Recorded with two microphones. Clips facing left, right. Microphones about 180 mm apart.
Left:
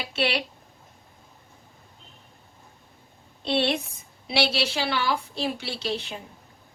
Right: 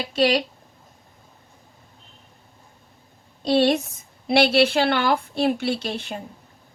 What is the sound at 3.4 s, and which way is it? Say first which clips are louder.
Speech: right 6 dB; 40° right (ahead or behind).